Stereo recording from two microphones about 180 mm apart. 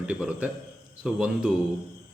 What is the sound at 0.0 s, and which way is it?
Speech, 5° right (ahead or behind).